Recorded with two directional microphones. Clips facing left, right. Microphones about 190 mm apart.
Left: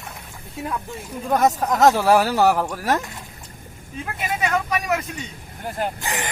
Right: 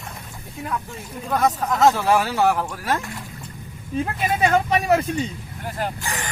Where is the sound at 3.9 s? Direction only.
30° right (ahead or behind).